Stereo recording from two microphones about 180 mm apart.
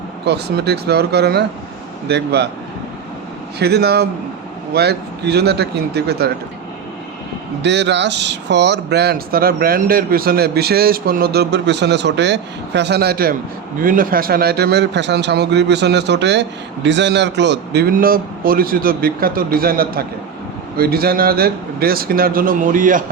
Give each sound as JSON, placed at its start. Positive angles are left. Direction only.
{"t": 0.3, "sound": "a man's voice", "side_deg": -65}
{"t": 3.6, "sound": "a man's voice", "side_deg": -65}
{"t": 7.6, "sound": "a man's voice", "side_deg": -75}